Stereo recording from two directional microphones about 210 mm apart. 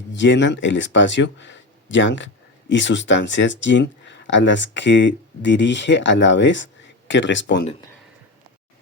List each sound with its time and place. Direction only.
0.1 s speech: 60° left (ahead or behind)